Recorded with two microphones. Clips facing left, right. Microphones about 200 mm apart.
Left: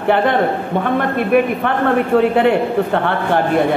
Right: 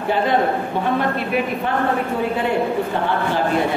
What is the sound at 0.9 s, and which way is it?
Speech, 55° left (ahead or behind).